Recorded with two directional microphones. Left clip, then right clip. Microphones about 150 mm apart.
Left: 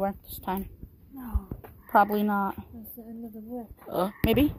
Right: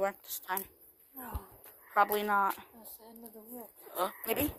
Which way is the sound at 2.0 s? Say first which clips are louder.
Left 3 dB; 20° left (ahead or behind).